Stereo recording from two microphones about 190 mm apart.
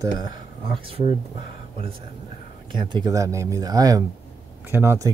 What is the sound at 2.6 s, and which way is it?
Speech, 25° right (ahead or behind).